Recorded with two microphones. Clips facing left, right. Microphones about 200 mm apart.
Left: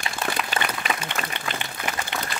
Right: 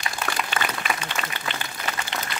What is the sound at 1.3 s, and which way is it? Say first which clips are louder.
Applause: left 1 dB; 20° left (ahead or behind).